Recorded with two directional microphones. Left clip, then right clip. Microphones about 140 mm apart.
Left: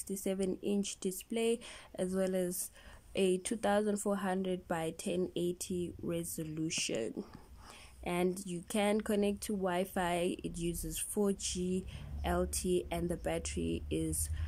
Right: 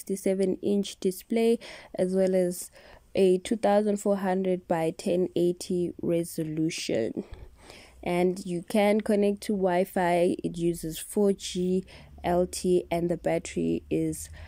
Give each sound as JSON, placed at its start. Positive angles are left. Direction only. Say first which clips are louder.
{"t": 0.0, "sound": "speech", "louder": "right 10 dB", "side_deg": -35}